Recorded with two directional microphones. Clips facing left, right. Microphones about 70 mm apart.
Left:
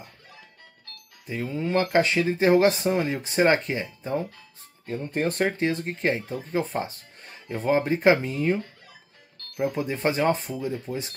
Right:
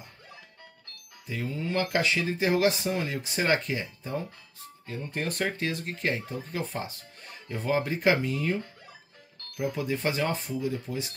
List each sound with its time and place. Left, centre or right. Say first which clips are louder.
1.2 s speech: left 4 dB; left
9.6 s speech: left 4 dB; left